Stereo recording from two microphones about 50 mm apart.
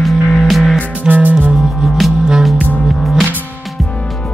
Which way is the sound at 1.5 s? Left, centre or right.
Centre.